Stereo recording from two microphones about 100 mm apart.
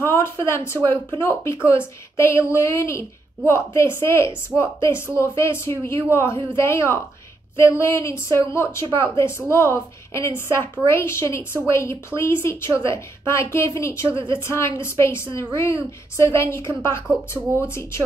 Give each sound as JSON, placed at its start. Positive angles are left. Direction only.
{"t": 0.0, "sound": "a woman's voice", "side_deg": 25}
{"t": 4.5, "sound": "a woman's voice", "side_deg": -10}
{"t": 4.8, "sound": "a woman's voice", "side_deg": 25}
{"t": 14.1, "sound": "a woman's voice", "side_deg": -55}
{"t": 14.4, "sound": "a woman's voice", "side_deg": 25}